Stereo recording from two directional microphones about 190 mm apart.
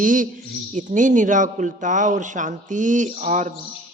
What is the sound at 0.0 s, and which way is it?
A man's voice, 45° right (ahead or behind).